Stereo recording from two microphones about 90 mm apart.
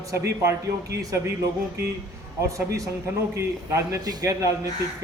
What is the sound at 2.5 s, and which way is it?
A man's voice, 40° right (ahead or behind).